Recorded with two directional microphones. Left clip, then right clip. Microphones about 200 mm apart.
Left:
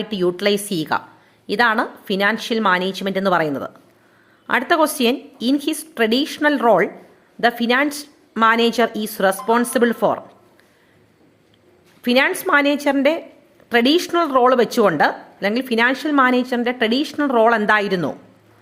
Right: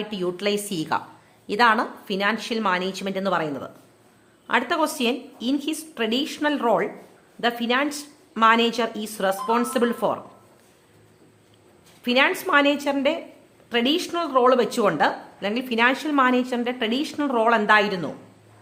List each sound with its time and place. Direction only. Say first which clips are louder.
0.0 s a woman's voice: left 6 dB; 25° left (ahead or behind)
12.0 s a woman's voice: left 3 dB; 25° left (ahead or behind)